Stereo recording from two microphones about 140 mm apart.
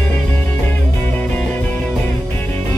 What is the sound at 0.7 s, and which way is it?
Music, 15° left (ahead or behind).